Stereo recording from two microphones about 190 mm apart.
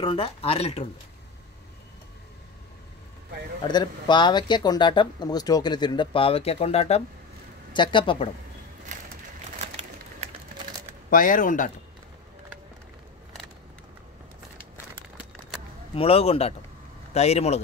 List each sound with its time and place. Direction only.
0.0 s speech: 30° left (ahead or behind)
3.6 s speech: 25° left (ahead or behind)
11.1 s speech: 45° left (ahead or behind)
15.9 s a man's voice: 30° left (ahead or behind)